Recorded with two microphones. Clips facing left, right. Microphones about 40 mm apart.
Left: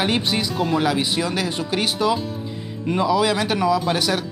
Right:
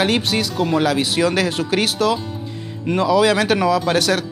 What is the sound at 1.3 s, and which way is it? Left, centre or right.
Speech, right.